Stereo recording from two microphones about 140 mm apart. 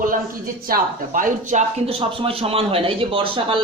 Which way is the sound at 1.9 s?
40° right (ahead or behind).